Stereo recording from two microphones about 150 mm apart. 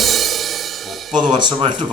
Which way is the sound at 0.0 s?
Centre (ahead or behind).